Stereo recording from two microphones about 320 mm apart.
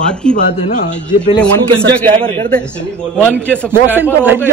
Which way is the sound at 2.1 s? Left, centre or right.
Centre.